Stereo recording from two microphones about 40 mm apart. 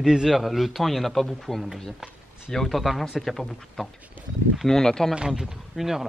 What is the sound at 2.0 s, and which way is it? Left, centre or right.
Speech, centre.